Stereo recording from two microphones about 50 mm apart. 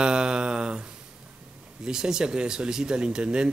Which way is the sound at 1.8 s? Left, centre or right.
Centre.